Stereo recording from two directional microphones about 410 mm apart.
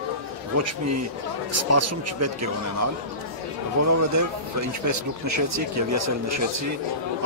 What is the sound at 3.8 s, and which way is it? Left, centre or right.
Speech, right.